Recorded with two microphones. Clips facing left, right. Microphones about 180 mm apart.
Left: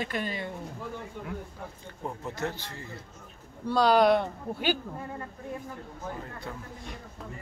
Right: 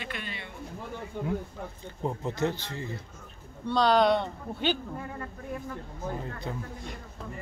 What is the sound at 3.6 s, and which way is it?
Speech, 10° left (ahead or behind).